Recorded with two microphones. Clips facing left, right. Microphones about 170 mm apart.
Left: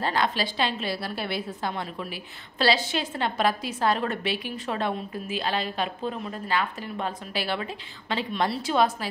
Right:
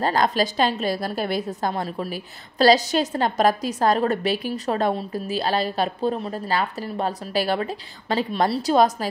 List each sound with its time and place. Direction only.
0.0 s a woman's voice: 40° right (ahead or behind)